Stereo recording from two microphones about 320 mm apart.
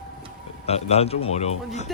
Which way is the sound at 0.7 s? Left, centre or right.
Centre.